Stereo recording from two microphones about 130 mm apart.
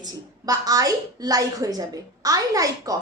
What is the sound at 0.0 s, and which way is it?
A woman's voice, 30° right (ahead or behind).